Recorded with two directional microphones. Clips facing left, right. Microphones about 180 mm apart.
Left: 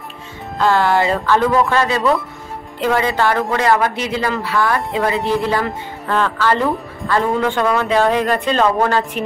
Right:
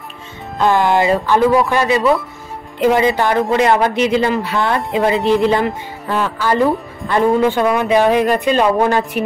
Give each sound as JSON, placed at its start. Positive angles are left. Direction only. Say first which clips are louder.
{"t": 0.6, "sound": "speech", "louder": "right 1 dB", "side_deg": -20}
{"t": 6.0, "sound": "speech", "louder": "left 1 dB", "side_deg": -10}